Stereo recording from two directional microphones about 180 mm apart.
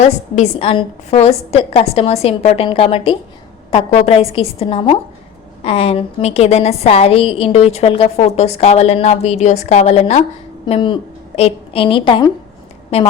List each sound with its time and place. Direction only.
0.0 s a woman's voice: 35° left (ahead or behind)